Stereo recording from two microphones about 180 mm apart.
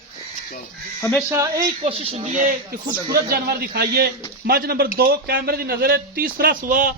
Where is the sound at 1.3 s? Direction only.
20° right (ahead or behind).